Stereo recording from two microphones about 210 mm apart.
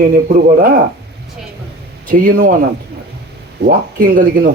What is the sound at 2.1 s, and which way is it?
A man's voice, 40° right (ahead or behind).